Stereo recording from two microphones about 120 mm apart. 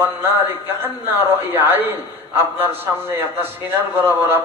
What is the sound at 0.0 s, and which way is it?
A man's voice, 15° right (ahead or behind).